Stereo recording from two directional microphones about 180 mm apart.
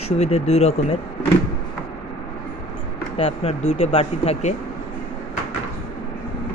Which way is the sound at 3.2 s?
35° left (ahead or behind).